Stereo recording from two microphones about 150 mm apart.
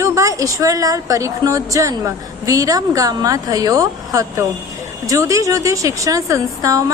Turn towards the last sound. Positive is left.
turn(degrees=-20)  # may be behind; listen again after turning